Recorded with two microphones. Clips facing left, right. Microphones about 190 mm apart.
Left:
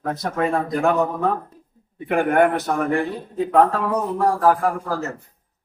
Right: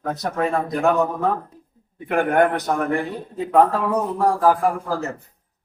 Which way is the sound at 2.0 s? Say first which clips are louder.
Left 1 dB; 5° left (ahead or behind).